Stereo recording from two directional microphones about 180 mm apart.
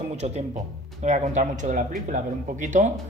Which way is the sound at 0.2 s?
35° right (ahead or behind).